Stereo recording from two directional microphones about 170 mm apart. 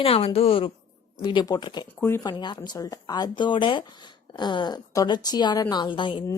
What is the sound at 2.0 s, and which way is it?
A woman's voice, 15° left (ahead or behind).